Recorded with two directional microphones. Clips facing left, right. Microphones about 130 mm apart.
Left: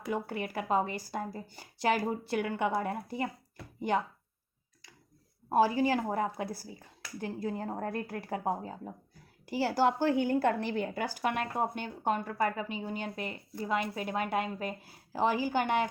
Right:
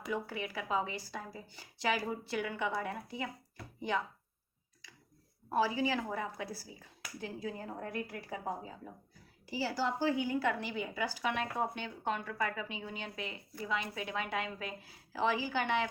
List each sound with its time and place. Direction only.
0.1 s a woman's voice: 50° left (ahead or behind)
5.5 s a woman's voice: 50° left (ahead or behind)
7.9 s a woman's voice: 35° left (ahead or behind)
8.1 s a woman's voice: 65° left (ahead or behind); by 15.9 s 50° left (ahead or behind)